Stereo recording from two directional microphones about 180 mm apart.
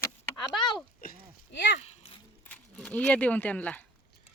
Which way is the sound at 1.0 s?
55° left (ahead or behind).